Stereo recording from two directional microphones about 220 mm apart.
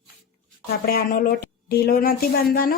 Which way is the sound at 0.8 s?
40° left (ahead or behind).